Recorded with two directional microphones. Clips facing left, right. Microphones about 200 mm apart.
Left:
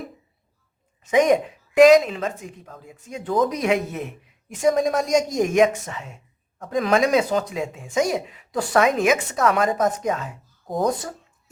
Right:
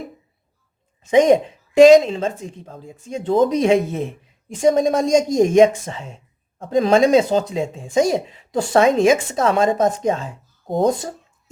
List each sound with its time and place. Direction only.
1.1 s a woman's voice: 25° right (ahead or behind)